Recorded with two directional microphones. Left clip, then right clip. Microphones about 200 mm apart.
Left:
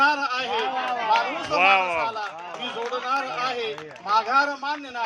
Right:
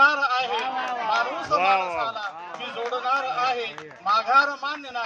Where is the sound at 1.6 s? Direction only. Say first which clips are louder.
Left 5 dB; centre (ahead or behind).